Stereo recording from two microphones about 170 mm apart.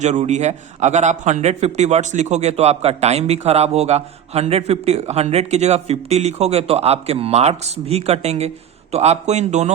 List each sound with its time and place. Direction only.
0.0 s a man's voice: 40° right (ahead or behind)